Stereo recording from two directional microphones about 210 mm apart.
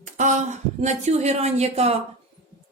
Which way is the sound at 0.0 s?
35° right (ahead or behind).